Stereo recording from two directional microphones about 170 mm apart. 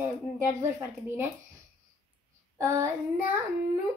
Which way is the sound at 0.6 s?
15° right (ahead or behind).